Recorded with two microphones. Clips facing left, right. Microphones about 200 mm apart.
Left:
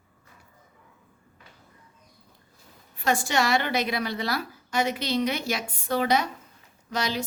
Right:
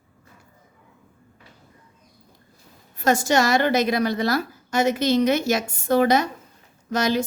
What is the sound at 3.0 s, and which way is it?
Speech, 40° right (ahead or behind).